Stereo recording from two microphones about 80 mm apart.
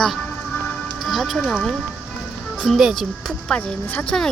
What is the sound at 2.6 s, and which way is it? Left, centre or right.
Speech, centre.